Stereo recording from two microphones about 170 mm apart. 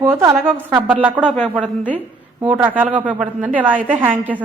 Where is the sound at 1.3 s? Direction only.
10° left (ahead or behind).